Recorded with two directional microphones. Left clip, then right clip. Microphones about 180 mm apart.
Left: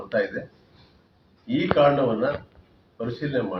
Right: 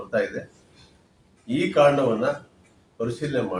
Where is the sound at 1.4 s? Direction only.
15° right (ahead or behind).